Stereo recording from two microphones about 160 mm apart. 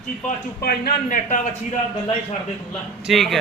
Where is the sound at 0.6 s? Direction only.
65° left (ahead or behind).